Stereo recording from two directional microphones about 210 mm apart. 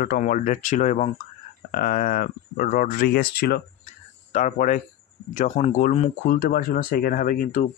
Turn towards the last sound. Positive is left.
turn(degrees=40)  # may be behind; listen again after turning